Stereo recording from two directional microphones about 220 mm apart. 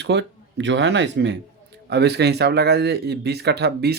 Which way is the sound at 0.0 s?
50° right (ahead or behind).